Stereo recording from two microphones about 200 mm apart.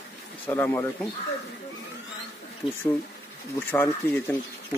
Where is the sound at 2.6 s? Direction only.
25° left (ahead or behind).